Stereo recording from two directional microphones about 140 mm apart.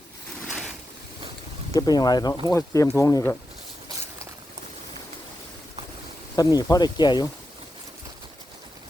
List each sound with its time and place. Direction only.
0.4 s boat: centre (ahead or behind)
1.7 s speech: 30° left (ahead or behind)
6.3 s speech: 25° left (ahead or behind)